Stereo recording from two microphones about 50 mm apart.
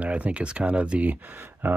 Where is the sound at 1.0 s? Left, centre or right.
Right.